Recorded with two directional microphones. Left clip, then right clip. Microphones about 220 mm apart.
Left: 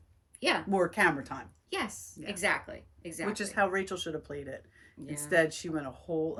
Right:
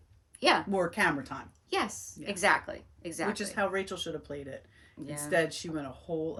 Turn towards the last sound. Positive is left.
turn(degrees=5)  # may be behind; listen again after turning